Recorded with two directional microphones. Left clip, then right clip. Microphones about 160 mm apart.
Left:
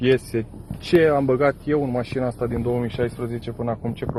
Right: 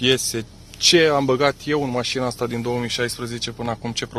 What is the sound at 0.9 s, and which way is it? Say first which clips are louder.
Speech: right 2 dB; 45° right (ahead or behind).